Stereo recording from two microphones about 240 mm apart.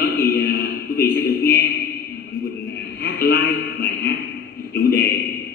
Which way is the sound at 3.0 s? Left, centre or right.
Left.